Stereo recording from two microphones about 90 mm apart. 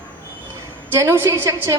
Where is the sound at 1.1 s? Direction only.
35° right (ahead or behind).